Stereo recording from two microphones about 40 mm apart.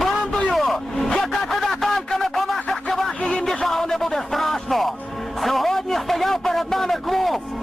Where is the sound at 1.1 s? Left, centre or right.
Centre.